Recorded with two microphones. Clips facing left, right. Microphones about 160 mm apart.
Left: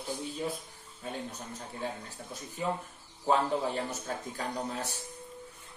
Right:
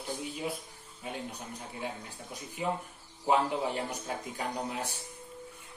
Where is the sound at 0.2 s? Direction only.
10° right (ahead or behind).